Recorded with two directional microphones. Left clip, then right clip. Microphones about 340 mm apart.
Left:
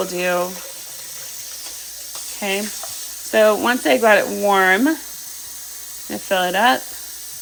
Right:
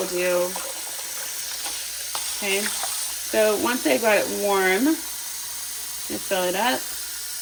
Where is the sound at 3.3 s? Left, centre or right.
Centre.